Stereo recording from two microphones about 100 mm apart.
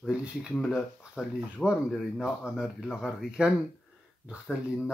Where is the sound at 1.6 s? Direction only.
5° left (ahead or behind).